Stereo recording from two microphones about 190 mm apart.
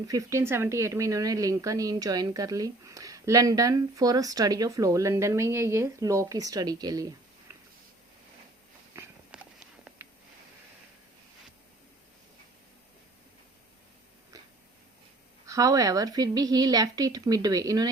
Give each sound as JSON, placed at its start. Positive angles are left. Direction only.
{"t": 0.1, "sound": "speech", "side_deg": -15}
{"t": 9.3, "sound": "a sound", "side_deg": -5}
{"t": 15.4, "sound": "a woman's voice", "side_deg": -20}